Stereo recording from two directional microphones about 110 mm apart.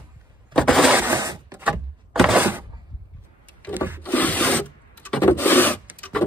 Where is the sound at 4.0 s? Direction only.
15° left (ahead or behind).